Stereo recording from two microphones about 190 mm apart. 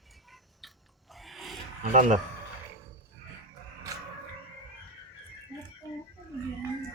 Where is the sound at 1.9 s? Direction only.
40° right (ahead or behind).